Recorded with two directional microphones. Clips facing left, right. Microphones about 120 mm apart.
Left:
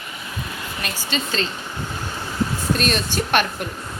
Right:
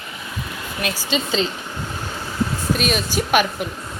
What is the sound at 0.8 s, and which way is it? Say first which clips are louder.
Speech: right 4 dB; 5° right (ahead or behind).